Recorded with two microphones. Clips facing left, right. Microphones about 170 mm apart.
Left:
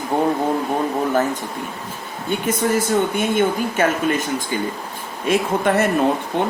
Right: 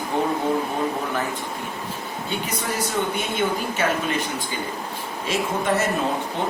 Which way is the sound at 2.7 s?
50° left (ahead or behind).